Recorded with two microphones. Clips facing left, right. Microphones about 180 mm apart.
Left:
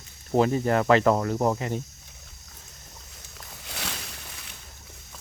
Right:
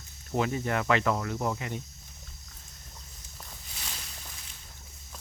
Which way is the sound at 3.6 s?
75° left (ahead or behind).